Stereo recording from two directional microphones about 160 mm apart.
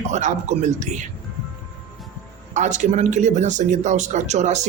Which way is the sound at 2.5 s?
50° right (ahead or behind).